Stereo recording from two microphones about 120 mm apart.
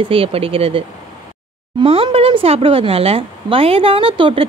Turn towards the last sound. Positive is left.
turn(degrees=-45)  # may be behind; listen again after turning